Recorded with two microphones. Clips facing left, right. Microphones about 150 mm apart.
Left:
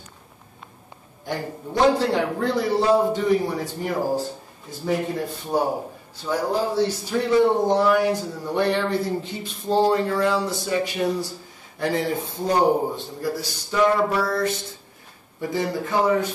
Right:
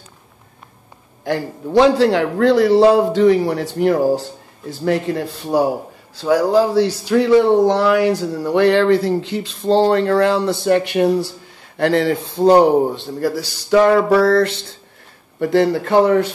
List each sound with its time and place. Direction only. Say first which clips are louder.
1.2 s speech: right 7 dB; 90° right; by 11.3 s 65° right (ahead or behind)
11.8 s a man's voice: right 8 dB; 80° right